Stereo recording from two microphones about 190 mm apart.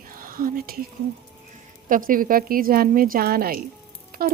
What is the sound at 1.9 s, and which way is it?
Speech, 45° right (ahead or behind).